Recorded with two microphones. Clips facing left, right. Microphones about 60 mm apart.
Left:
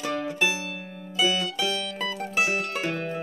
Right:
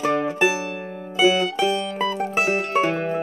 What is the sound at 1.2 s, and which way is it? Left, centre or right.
Mandolin, right.